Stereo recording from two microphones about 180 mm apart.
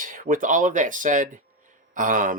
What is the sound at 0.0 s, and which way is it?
Speech, 50° right (ahead or behind).